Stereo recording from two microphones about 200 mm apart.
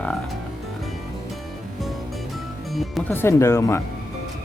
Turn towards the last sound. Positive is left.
turn(degrees=15)  # may be behind; listen again after turning